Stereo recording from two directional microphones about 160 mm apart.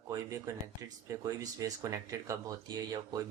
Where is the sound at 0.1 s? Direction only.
20° right (ahead or behind).